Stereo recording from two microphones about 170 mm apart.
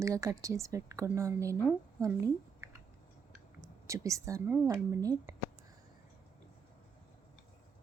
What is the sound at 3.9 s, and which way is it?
A woman's voice, 20° right (ahead or behind).